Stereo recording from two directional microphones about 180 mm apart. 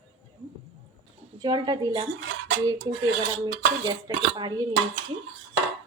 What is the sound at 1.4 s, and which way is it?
Speech, 25° right (ahead or behind).